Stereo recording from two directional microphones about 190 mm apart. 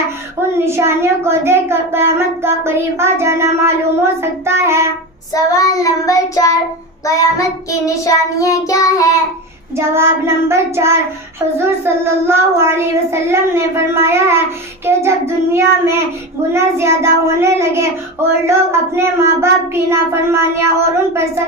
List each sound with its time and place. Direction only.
0.3 s a child's voice: 15° right (ahead or behind)
5.3 s child singing: 20° left (ahead or behind)
9.7 s a child's voice: 15° right (ahead or behind)